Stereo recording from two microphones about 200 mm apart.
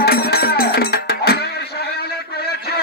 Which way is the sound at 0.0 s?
50° left (ahead or behind).